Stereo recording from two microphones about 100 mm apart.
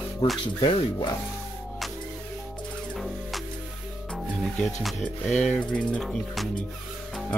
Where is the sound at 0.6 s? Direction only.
50° left (ahead or behind).